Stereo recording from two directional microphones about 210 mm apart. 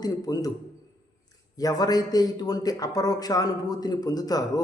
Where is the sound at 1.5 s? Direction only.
20° left (ahead or behind).